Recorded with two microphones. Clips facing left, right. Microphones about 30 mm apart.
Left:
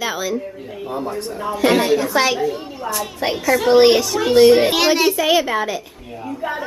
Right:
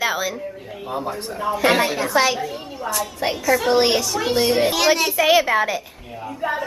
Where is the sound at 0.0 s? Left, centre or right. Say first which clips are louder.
Even; centre.